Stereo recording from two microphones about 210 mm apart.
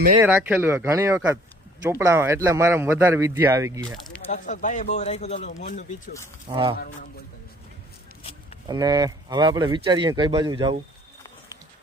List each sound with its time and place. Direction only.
0.2 s speech: 10° right (ahead or behind)
3.9 s speech: centre (ahead or behind)
4.3 s speech: 35° left (ahead or behind)
6.5 s speech: 25° right (ahead or behind)
6.7 s speech: 45° left (ahead or behind)
8.6 s speech: 20° right (ahead or behind)